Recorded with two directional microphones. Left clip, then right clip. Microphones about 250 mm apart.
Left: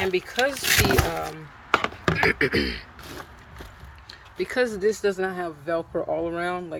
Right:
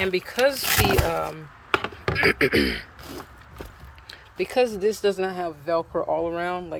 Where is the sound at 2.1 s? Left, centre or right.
Centre.